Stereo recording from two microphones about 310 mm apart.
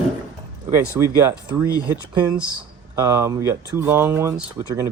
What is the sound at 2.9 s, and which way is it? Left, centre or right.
Speech, centre.